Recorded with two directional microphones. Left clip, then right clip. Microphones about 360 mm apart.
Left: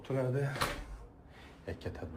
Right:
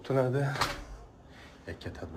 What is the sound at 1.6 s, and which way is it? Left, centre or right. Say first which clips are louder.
Speech: right 1 dB; centre.